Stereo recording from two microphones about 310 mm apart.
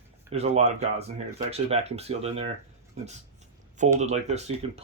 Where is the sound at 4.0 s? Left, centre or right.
Right.